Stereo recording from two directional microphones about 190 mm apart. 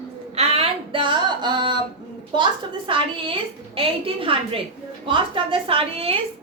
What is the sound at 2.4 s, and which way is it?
A woman's voice, 25° right (ahead or behind).